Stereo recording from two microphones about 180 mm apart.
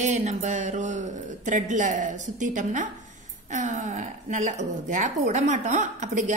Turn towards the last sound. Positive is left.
turn(degrees=-40)  # may be behind; listen again after turning